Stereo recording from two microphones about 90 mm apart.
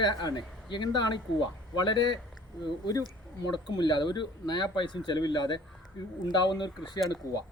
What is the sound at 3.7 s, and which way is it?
Speech, 60° left (ahead or behind).